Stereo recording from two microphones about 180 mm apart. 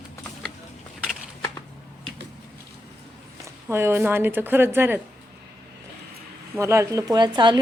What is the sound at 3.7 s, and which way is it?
A woman's voice, 15° right (ahead or behind).